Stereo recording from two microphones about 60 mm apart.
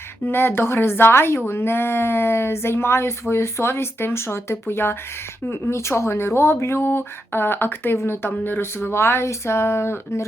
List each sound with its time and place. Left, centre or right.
0.3 s a woman's voice: left